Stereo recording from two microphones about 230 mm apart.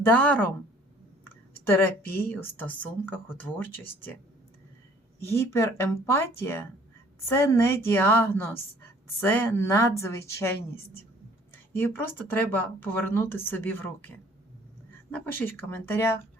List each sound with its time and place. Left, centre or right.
0.0 s speech: centre
2.0 s speech: left
2.6 s speech: centre
5.2 s speech: centre
11.8 s speech: centre
15.1 s speech: centre